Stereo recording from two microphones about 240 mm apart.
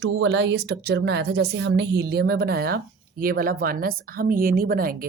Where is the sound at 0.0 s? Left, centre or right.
Right.